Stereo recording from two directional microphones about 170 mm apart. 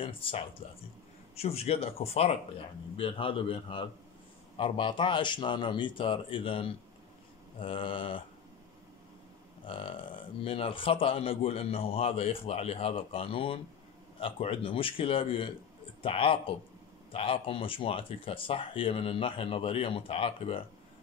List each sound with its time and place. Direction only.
0.0 s speech: 30° left (ahead or behind)
9.7 s speech: 30° left (ahead or behind)